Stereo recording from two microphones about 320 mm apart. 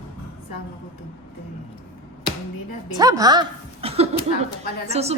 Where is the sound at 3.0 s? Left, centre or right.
Centre.